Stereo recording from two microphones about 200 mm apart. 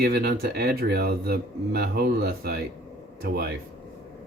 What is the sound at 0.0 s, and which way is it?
Speech, 50° right (ahead or behind).